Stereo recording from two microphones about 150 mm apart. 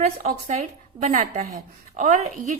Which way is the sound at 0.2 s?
60° right (ahead or behind).